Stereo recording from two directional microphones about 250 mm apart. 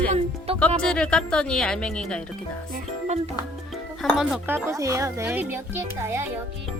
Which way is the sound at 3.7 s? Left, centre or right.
Centre.